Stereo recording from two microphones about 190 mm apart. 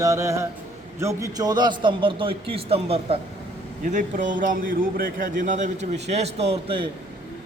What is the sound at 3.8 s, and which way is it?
A man's voice, 40° right (ahead or behind).